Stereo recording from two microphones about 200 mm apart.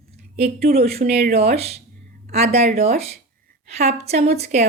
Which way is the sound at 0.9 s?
30° right (ahead or behind).